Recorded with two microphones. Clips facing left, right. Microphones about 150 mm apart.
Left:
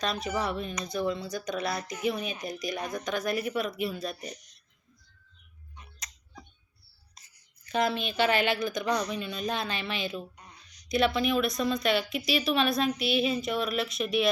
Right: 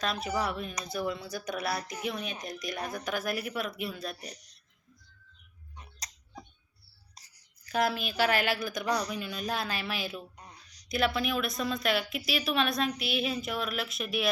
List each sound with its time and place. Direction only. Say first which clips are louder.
0.0 s speech: left 1 dB; 5° right (ahead or behind)
4.3 s speech: left 4 dB; 35° right (ahead or behind)
5.7 s tick-tock: right 1 dB; 35° right (ahead or behind)
7.7 s speech: left 1 dB; 5° right (ahead or behind)
10.3 s a sound: right 1 dB; 35° right (ahead or behind)
10.8 s speech: left 3 dB; centre (ahead or behind)